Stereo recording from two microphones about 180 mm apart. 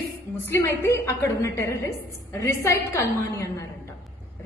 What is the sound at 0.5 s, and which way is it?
A woman's voice, 15° left (ahead or behind).